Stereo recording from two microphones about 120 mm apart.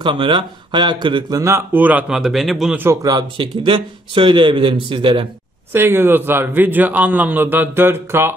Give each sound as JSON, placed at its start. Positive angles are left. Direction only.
{"t": 0.0, "sound": "a man's voice", "side_deg": -45}
{"t": 1.3, "sound": "a man's voice", "side_deg": -25}
{"t": 2.8, "sound": "speech", "side_deg": -25}
{"t": 3.3, "sound": "speech", "side_deg": -45}
{"t": 5.7, "sound": "a man's voice", "side_deg": -20}